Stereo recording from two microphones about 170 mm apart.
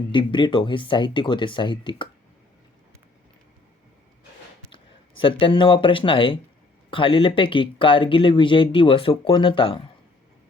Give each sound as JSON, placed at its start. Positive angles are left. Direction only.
{"t": 0.1, "sound": "speech", "side_deg": 30}
{"t": 5.2, "sound": "speech", "side_deg": 30}